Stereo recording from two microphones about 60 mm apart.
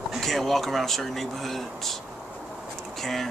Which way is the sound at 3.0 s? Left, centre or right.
Centre.